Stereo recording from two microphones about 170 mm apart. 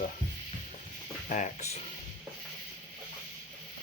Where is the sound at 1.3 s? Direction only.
45° left (ahead or behind).